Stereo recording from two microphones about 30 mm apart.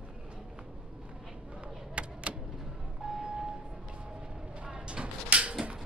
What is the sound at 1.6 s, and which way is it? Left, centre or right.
Vehicle, right.